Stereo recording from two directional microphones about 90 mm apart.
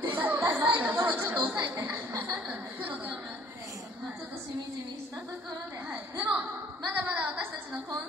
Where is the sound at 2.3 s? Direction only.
15° right (ahead or behind).